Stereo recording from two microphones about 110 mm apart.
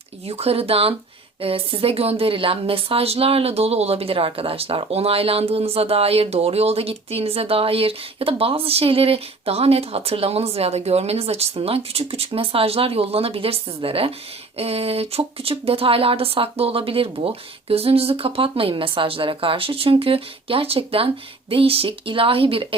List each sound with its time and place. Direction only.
0.3 s speech: 65° right (ahead or behind)